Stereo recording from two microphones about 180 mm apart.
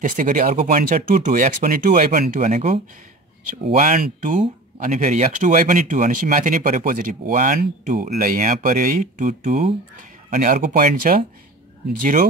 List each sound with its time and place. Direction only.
0.0 s speech: 50° right (ahead or behind)